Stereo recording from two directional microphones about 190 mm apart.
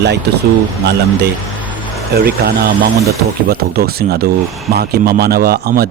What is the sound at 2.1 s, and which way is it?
Speech, 55° right (ahead or behind).